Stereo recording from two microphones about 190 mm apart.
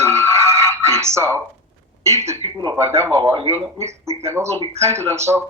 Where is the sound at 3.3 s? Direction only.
35° right (ahead or behind).